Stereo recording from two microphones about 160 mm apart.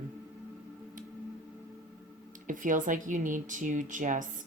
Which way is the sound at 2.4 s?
55° right (ahead or behind).